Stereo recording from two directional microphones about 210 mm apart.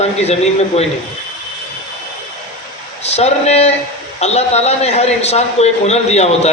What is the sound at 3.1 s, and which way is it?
A man's voice, 30° left (ahead or behind).